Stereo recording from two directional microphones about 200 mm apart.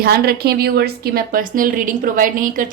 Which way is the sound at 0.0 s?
50° right (ahead or behind).